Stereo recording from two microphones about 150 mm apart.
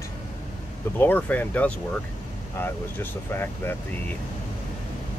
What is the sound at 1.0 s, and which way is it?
Speech, 10° left (ahead or behind).